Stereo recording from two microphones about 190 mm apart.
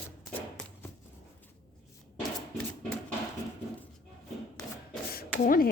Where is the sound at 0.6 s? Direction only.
5° left (ahead or behind).